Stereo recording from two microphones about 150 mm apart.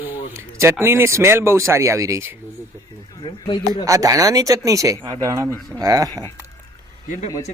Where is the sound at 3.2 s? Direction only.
30° left (ahead or behind).